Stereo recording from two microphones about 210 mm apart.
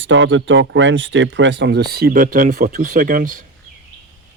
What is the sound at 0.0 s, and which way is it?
Speech, 65° right (ahead or behind).